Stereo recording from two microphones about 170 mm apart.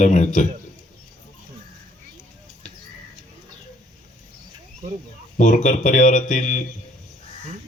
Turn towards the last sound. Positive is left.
turn(degrees=45)  # may be behind; listen again after turning